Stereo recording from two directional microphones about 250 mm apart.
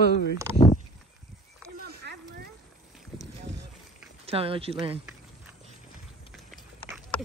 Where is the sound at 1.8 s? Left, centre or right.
Right.